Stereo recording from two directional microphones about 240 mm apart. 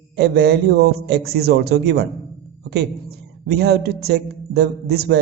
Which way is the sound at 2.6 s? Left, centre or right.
Right.